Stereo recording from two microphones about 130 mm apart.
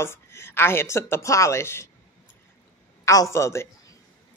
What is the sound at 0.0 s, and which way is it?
A woman's voice, 20° left (ahead or behind).